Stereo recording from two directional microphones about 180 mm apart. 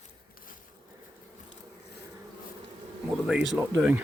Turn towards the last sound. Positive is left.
turn(degrees=-5)  # may be behind; listen again after turning